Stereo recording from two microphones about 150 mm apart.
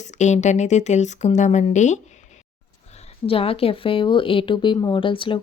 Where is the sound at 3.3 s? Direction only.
40° left (ahead or behind).